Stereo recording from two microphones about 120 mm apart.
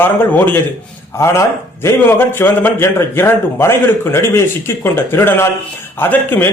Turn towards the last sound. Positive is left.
turn(degrees=15)  # may be behind; listen again after turning